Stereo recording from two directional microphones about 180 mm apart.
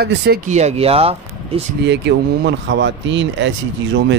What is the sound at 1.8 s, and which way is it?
Speech, 75° right (ahead or behind).